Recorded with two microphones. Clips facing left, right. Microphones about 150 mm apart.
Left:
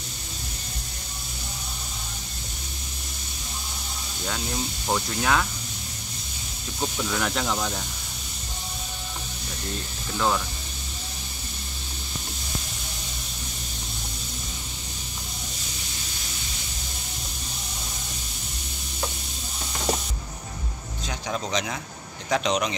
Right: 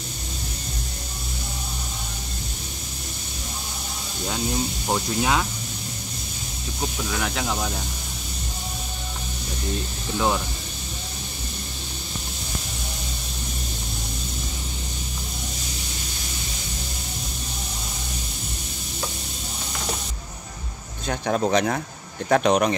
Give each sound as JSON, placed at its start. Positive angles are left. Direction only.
{"t": 4.8, "sound": "speech", "side_deg": -15}
{"t": 6.8, "sound": "speech", "side_deg": -5}
{"t": 10.1, "sound": "speech", "side_deg": -15}
{"t": 21.1, "sound": "speech", "side_deg": -55}